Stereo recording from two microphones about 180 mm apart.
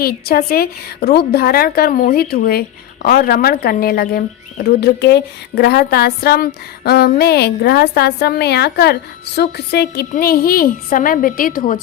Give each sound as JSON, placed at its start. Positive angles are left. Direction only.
{"t": 0.0, "sound": "speech", "side_deg": 55}
{"t": 10.1, "sound": "a woman's voice", "side_deg": 55}